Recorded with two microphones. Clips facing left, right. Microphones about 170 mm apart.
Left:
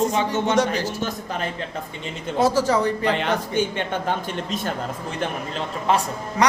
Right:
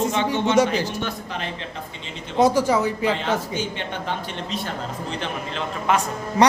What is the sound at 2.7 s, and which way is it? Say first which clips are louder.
Speech: even; 10° right (ahead or behind).